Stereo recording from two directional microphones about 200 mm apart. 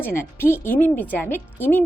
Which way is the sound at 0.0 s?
10° left (ahead or behind).